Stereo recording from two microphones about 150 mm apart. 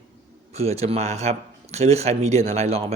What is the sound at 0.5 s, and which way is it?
Speech, 45° right (ahead or behind).